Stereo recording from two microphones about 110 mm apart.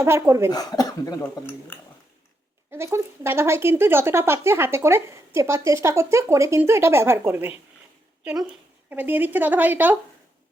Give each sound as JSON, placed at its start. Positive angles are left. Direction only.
{"t": 0.0, "sound": "speech", "side_deg": -25}
{"t": 0.5, "sound": "speech", "side_deg": 35}
{"t": 1.2, "sound": "speech", "side_deg": 15}
{"t": 2.7, "sound": "speech", "side_deg": -25}
{"t": 8.2, "sound": "speech", "side_deg": -10}